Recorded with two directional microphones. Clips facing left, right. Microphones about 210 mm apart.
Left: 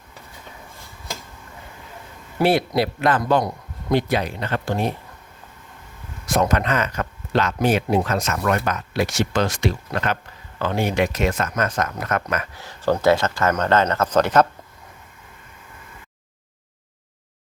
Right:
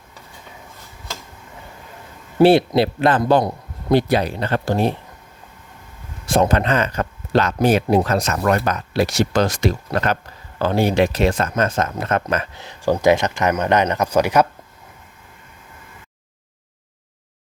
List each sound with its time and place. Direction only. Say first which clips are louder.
2.4 s speech: right 6 dB; 30° right (ahead or behind)
6.2 s speech: right 3 dB; 30° right (ahead or behind); by 14.4 s 10° right (ahead or behind)